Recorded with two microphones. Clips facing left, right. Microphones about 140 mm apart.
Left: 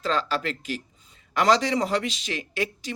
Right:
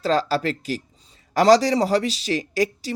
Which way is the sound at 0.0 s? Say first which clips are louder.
Right 5 dB; 35° right (ahead or behind).